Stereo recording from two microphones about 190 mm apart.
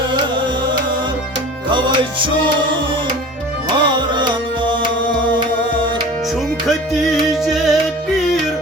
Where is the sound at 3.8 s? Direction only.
25° right (ahead or behind).